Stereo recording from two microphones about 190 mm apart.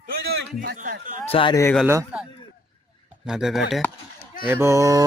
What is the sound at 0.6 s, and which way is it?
Speech, 50° right (ahead or behind).